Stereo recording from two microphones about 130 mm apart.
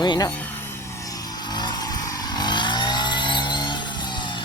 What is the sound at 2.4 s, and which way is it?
Vehicle, 35° left (ahead or behind).